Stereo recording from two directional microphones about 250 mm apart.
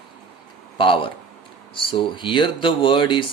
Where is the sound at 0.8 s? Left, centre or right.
Left.